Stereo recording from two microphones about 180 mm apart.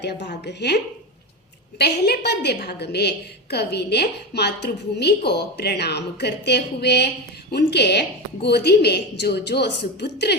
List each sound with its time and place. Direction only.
0.0 s a woman's voice: 70° left (ahead or behind)
1.8 s a woman's voice: 65° left (ahead or behind)